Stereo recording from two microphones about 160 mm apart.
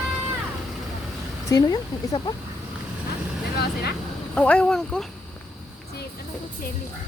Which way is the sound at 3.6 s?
85° left.